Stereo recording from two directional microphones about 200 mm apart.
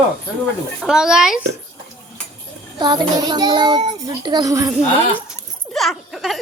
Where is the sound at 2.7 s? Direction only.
20° right (ahead or behind).